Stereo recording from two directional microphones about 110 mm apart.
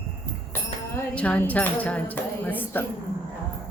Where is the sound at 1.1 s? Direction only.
10° left (ahead or behind).